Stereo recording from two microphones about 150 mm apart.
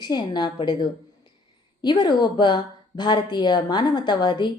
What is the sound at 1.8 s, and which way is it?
A woman's voice, 30° left (ahead or behind).